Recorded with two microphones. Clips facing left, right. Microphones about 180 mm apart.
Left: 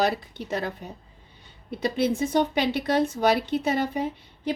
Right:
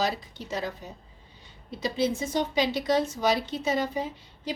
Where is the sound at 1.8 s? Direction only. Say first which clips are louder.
Left 3 dB; 60° left (ahead or behind).